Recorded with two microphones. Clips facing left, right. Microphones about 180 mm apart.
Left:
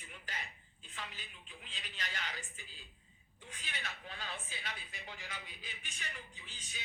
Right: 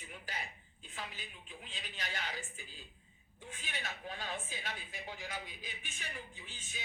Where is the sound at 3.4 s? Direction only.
40° right (ahead or behind).